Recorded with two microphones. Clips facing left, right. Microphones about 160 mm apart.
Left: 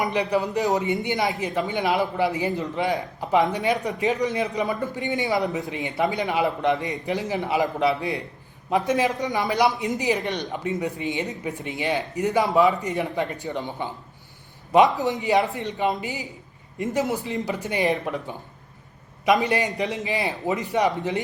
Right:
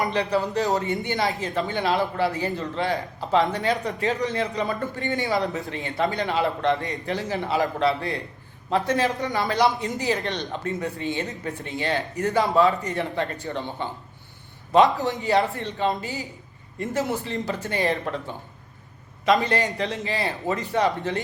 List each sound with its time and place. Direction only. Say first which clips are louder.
0.0 s a man's voice: even; 20° left (ahead or behind)